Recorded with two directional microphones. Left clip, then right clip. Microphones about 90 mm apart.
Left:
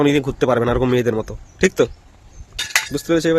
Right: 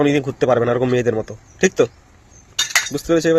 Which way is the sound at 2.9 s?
45° left (ahead or behind).